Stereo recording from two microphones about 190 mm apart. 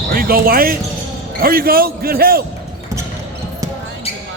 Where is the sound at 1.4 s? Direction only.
50° right (ahead or behind).